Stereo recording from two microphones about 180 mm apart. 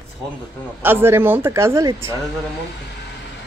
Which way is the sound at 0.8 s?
10° right (ahead or behind).